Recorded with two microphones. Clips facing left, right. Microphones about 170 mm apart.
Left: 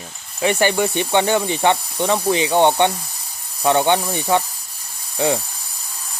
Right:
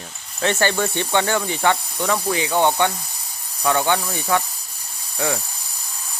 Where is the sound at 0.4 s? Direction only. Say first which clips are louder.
Left 3 dB; 15° left (ahead or behind).